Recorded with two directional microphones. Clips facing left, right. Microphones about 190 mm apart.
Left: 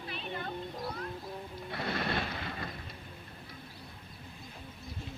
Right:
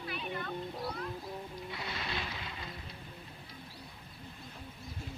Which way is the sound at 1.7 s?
55° left (ahead or behind).